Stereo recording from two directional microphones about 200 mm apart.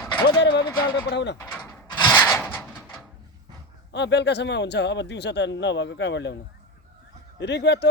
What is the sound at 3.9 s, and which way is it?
Speech, 60° left (ahead or behind).